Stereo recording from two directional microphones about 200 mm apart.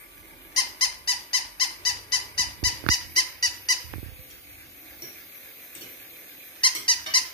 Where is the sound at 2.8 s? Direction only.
20° left (ahead or behind).